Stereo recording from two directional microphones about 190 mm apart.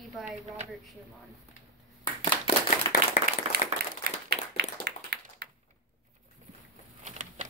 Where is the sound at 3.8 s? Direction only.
55° right (ahead or behind).